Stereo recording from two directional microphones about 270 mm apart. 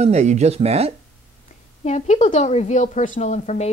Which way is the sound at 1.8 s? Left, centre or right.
Left.